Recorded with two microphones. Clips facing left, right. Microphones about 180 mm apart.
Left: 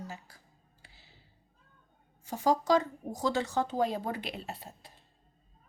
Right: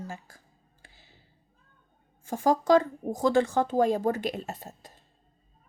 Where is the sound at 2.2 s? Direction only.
50° right (ahead or behind).